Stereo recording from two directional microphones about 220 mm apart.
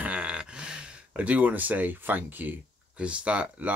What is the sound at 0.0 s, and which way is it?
Speech, 5° right (ahead or behind).